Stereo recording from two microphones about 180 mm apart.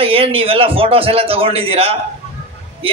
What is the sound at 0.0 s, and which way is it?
A man's voice, 30° right (ahead or behind).